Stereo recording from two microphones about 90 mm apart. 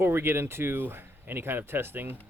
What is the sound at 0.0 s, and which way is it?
Speech, 25° right (ahead or behind).